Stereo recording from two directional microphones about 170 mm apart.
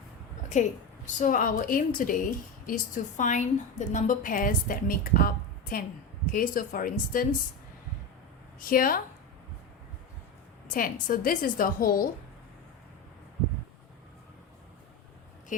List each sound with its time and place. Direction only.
0.5 s a woman's voice: 45° left (ahead or behind)
8.7 s a woman's voice: 55° left (ahead or behind)
10.7 s a woman's voice: 55° left (ahead or behind)